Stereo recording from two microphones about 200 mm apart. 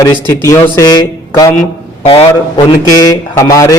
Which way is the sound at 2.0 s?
25° left (ahead or behind).